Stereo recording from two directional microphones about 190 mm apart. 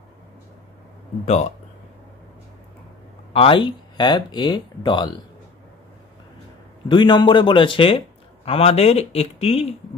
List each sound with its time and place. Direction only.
1.2 s speech: 35° left (ahead or behind)
3.3 s speech: 25° left (ahead or behind)
6.9 s speech: 25° left (ahead or behind)